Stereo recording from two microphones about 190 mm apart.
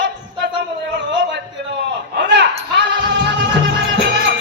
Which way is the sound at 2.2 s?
70° right (ahead or behind).